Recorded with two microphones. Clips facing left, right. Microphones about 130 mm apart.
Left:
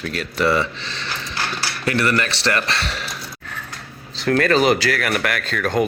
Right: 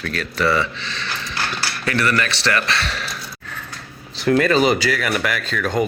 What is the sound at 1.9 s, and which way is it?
Speech, 25° left (ahead or behind).